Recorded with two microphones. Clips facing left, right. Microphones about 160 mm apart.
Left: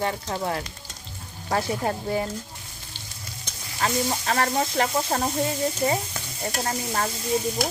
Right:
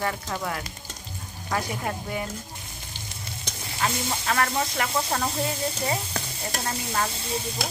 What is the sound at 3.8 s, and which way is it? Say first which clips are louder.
A woman's voice: left 3 dB; 30° left (ahead or behind).